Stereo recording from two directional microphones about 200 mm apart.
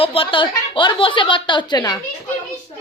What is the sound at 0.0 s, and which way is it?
A woman's voice, 25° left (ahead or behind).